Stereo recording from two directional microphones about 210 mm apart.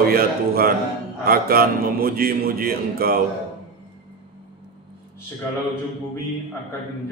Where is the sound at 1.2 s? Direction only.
45° right (ahead or behind).